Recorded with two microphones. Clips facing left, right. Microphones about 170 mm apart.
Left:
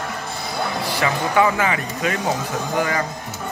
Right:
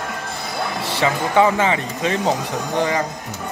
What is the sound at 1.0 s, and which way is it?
Speech, 20° right (ahead or behind).